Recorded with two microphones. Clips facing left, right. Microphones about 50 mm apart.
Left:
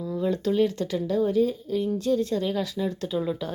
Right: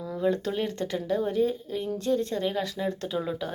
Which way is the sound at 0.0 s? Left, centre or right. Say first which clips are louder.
Left 1 dB; right.